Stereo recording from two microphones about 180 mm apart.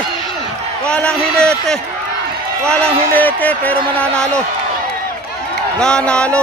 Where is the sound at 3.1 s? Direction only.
10° left (ahead or behind).